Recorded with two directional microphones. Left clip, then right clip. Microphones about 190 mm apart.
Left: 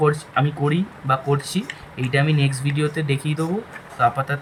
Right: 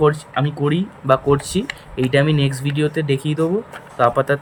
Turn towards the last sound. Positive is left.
turn(degrees=-15)  # may be behind; listen again after turning